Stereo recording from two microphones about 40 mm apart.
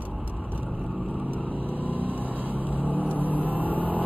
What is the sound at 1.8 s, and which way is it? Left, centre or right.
Vehicle, right.